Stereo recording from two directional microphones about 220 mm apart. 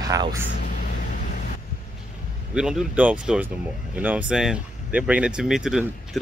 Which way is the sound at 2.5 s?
5° right (ahead or behind).